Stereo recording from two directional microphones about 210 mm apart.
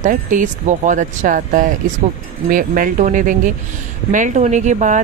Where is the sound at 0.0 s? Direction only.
35° right (ahead or behind).